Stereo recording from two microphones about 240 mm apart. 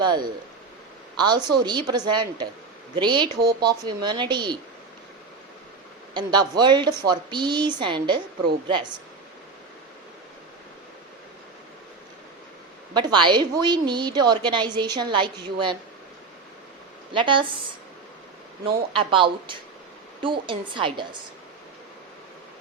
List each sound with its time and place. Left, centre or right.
0.0 s a woman's voice: centre
6.1 s a woman's voice: centre
12.9 s a woman's voice: centre
17.1 s a woman's voice: right
18.6 s a woman's voice: right